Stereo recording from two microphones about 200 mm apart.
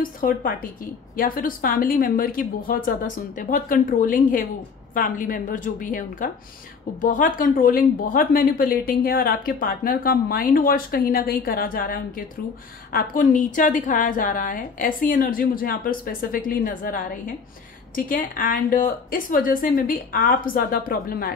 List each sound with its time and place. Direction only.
0.0 s a woman's voice: 45° left (ahead or behind)